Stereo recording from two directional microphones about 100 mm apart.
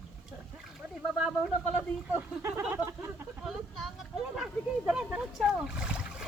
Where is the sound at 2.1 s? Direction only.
25° right (ahead or behind).